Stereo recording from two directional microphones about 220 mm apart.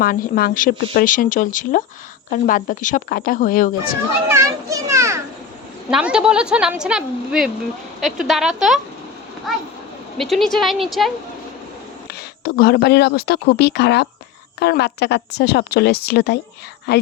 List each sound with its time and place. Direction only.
0.0 s speech: 40° left (ahead or behind)
4.3 s children playing: 15° right (ahead or behind)
5.9 s a woman's voice: 5° right (ahead or behind)
10.2 s a woman's voice: centre (ahead or behind)
12.5 s a woman's voice: 45° left (ahead or behind)